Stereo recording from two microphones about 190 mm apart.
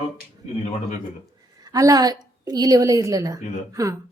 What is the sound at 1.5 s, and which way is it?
A woman's voice, 20° right (ahead or behind).